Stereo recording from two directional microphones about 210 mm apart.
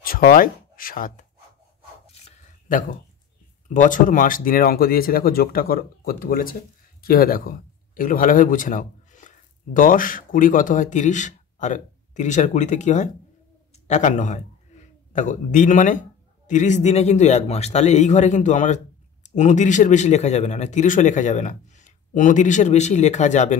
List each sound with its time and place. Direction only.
0.0 s speech: 45° left (ahead or behind)
2.7 s a man's voice: 40° left (ahead or behind)